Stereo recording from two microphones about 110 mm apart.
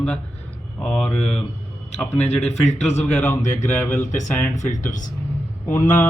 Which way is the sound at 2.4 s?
80° left.